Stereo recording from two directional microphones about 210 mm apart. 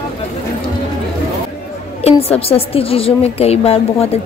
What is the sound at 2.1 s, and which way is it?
A woman's voice, 25° left (ahead or behind).